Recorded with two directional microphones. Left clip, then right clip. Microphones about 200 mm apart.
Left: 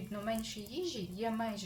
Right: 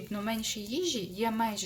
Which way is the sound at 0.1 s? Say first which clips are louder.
Right 4 dB; 40° right (ahead or behind).